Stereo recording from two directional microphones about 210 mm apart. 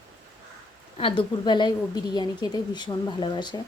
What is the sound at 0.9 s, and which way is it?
Speech, 25° left (ahead or behind).